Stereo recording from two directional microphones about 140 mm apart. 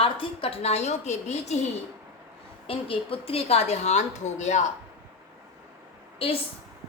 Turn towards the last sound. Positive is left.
turn(degrees=45)  # may be behind; listen again after turning